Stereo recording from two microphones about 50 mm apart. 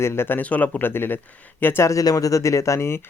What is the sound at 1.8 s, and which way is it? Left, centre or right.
Speech, left.